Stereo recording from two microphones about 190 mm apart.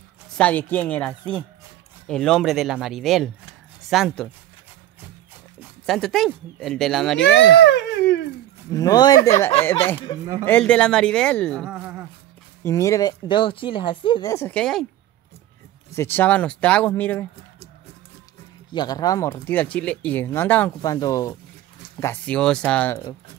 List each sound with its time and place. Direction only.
0.4 s speech: 10° left (ahead or behind)
5.6 s speech: centre (ahead or behind)
7.2 s speech: 70° left (ahead or behind)
8.7 s speech: 20° left (ahead or behind)
10.4 s speech: 10° left (ahead or behind)
12.6 s speech: 15° left (ahead or behind)
15.9 s speech: 10° left (ahead or behind)
18.7 s speech: 20° left (ahead or behind)
22.0 s speech: 10° left (ahead or behind)